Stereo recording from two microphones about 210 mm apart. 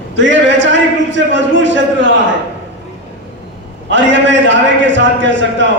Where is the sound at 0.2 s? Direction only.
60° right (ahead or behind).